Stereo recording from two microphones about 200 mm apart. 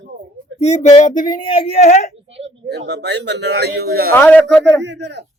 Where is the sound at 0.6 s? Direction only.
35° left (ahead or behind).